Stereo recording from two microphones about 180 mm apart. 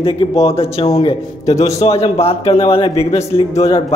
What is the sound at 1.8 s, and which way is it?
A man's voice, 35° left (ahead or behind).